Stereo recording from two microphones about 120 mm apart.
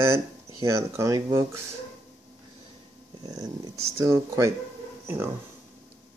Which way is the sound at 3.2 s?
35° right (ahead or behind).